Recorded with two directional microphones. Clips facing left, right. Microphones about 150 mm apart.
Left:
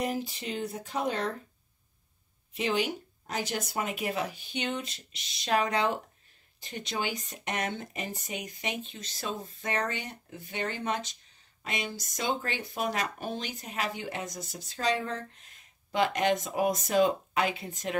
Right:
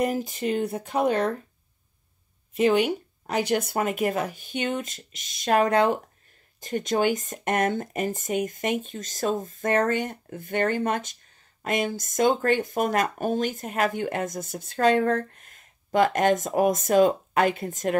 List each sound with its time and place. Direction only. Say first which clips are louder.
0.0 s speech: right 7 dB; 50° right (ahead or behind)
2.5 s speech: right 9 dB; 55° right (ahead or behind)